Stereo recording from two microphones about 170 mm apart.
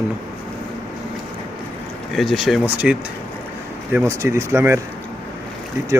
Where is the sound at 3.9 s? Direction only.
15° right (ahead or behind).